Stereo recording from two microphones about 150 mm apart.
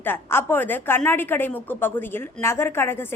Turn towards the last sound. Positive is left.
turn(degrees=15)  # may be behind; listen again after turning